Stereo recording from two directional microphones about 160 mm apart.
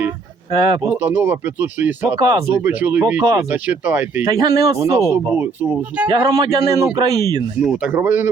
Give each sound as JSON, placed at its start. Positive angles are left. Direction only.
{"t": 0.5, "sound": "speech", "side_deg": -30}
{"t": 0.8, "sound": "speech", "side_deg": -10}
{"t": 2.1, "sound": "a man's voice", "side_deg": -25}
{"t": 2.6, "sound": "a man's voice", "side_deg": -10}
{"t": 6.1, "sound": "a man's voice", "side_deg": -25}
{"t": 7.6, "sound": "speech", "side_deg": -5}